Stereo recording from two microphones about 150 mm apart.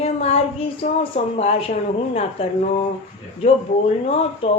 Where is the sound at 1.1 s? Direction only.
45° left (ahead or behind).